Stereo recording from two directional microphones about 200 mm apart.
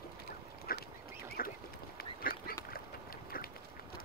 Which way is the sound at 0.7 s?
50° left (ahead or behind).